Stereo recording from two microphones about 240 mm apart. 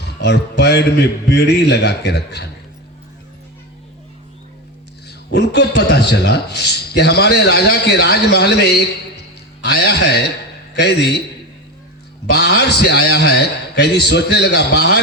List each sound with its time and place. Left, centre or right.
0.2 s a man's voice: left
5.0 s a sound: left
5.5 s a man's voice: left
12.3 s a man's voice: left